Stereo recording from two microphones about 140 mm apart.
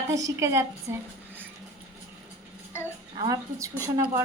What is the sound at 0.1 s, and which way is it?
Speech, 25° right (ahead or behind).